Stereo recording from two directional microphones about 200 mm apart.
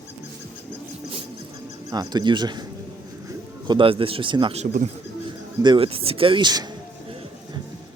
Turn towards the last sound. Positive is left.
turn(degrees=-20)  # may be behind; listen again after turning